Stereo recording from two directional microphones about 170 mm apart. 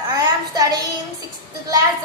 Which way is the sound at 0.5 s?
25° right (ahead or behind).